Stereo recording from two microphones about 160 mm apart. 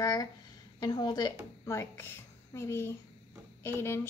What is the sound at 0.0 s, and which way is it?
A woman's voice, 25° left (ahead or behind).